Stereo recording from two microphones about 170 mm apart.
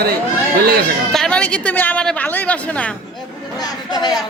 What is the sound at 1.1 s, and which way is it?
A man's voice, 5° left (ahead or behind).